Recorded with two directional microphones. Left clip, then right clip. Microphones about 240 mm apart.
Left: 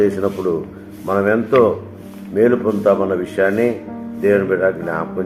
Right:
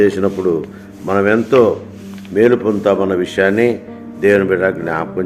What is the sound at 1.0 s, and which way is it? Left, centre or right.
A man's voice, right.